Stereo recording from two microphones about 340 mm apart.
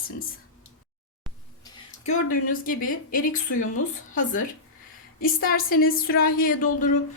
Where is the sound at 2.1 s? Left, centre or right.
Left.